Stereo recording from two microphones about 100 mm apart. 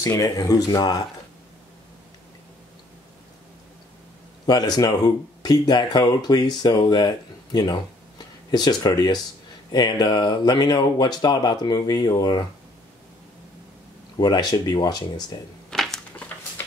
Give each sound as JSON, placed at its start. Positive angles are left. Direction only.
{"t": 0.2, "sound": "speech", "side_deg": 35}
{"t": 4.5, "sound": "speech", "side_deg": 45}
{"t": 14.1, "sound": "speech", "side_deg": 45}
{"t": 15.7, "sound": "a sound", "side_deg": 5}